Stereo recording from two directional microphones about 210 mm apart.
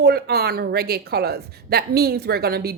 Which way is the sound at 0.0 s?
50° right (ahead or behind).